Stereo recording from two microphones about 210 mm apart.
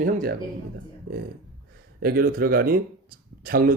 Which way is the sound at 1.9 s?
45° right (ahead or behind).